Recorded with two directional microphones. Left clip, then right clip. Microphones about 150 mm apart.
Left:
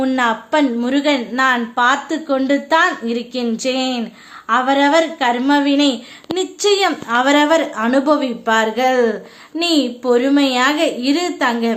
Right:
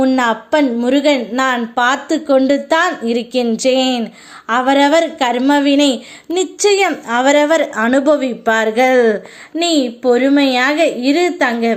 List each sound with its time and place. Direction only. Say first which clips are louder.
0.2 s a woman's voice: right 2 dB; 25° right (ahead or behind)